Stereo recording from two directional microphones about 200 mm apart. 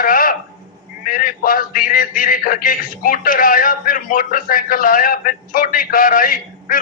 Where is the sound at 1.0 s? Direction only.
45° left (ahead or behind).